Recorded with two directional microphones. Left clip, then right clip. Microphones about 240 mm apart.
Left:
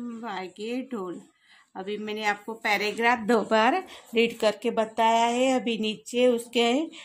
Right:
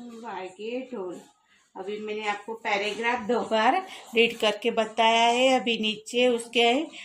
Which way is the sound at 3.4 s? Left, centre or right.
Left.